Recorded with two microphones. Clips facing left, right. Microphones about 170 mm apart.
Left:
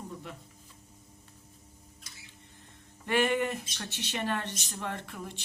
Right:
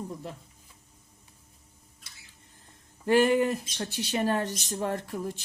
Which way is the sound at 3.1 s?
35° right (ahead or behind).